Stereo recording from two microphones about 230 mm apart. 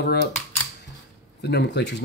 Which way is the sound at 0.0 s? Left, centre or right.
Left.